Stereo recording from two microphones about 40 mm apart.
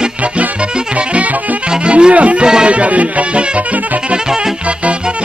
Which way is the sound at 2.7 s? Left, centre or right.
Right.